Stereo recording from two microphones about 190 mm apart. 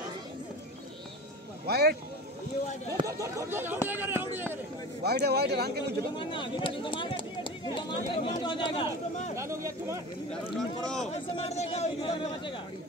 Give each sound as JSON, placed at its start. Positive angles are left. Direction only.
{"t": 1.7, "sound": "speech", "side_deg": -55}
{"t": 3.0, "sound": "speech", "side_deg": -15}
{"t": 5.0, "sound": "speech", "side_deg": -55}
{"t": 6.1, "sound": "speech", "side_deg": 25}
{"t": 9.3, "sound": "speech", "side_deg": -15}
{"t": 10.5, "sound": "speech", "side_deg": 0}
{"t": 11.1, "sound": "speech", "side_deg": 35}